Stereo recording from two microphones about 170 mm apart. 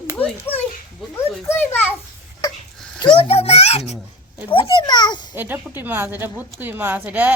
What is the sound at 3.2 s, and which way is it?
A child's voice, 35° left (ahead or behind).